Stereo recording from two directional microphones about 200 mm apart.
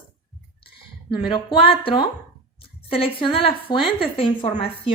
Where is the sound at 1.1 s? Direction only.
25° left (ahead or behind).